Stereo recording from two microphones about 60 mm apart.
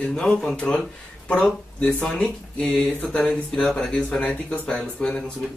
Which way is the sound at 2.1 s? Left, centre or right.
Centre.